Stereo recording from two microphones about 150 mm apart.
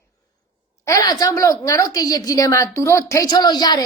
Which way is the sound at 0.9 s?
25° left (ahead or behind).